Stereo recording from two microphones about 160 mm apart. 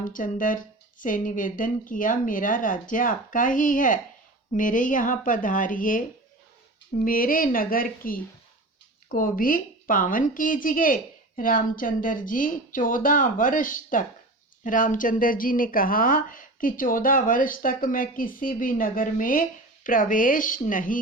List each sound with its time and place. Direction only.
0.0 s speech: 55° left (ahead or behind)